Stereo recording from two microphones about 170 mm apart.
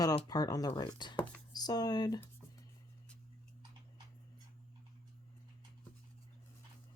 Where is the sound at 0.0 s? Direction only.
20° left (ahead or behind).